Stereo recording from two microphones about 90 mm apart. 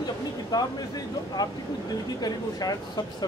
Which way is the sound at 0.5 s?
50° left (ahead or behind).